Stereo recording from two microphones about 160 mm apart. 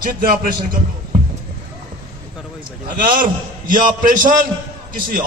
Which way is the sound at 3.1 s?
55° right (ahead or behind).